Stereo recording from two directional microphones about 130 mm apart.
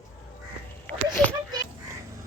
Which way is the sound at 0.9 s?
10° left (ahead or behind).